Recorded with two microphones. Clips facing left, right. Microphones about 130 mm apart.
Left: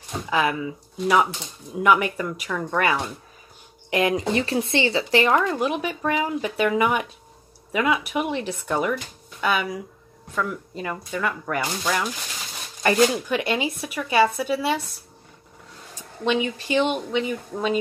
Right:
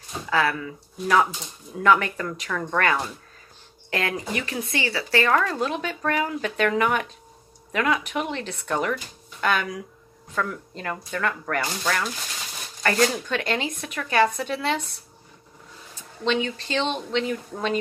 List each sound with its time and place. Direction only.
0.3 s speech: 15° left (ahead or behind)
15.9 s speech: 15° left (ahead or behind)